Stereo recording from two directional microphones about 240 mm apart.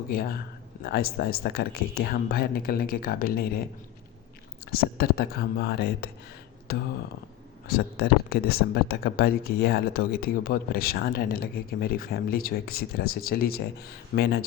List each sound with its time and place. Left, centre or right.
0.1 s speech: left
4.6 s speech: left